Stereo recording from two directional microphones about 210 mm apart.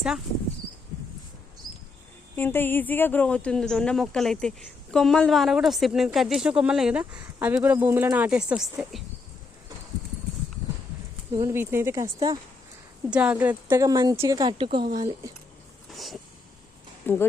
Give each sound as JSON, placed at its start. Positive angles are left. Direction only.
{"t": 2.3, "sound": "speech", "side_deg": 10}
{"t": 11.3, "sound": "speech", "side_deg": -10}
{"t": 13.1, "sound": "speech", "side_deg": -5}
{"t": 15.9, "sound": "vehicle", "side_deg": 0}
{"t": 17.1, "sound": "speech", "side_deg": 10}